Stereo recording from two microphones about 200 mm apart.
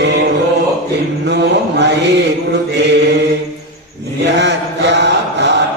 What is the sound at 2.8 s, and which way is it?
Mantra, 60° right (ahead or behind).